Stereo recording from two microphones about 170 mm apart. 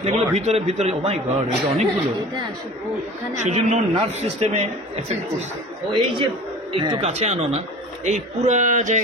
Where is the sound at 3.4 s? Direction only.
45° right (ahead or behind).